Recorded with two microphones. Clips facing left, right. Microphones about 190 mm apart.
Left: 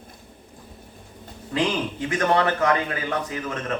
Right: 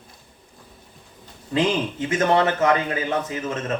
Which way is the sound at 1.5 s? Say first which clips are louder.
Right 3 dB; 25° right (ahead or behind).